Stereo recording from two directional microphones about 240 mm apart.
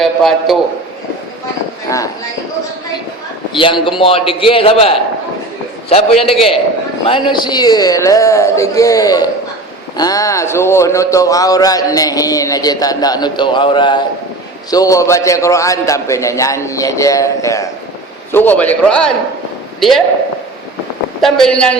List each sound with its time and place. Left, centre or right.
0.0 s a man's voice: centre
1.9 s a man's voice: centre
3.5 s a man's voice: left; by 19.1 s centre
21.2 s a man's voice: centre